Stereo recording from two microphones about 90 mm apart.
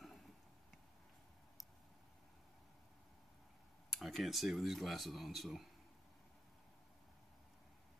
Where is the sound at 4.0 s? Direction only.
Centre (ahead or behind).